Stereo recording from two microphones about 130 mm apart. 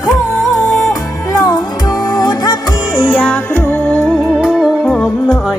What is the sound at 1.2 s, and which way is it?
Music, 25° left (ahead or behind).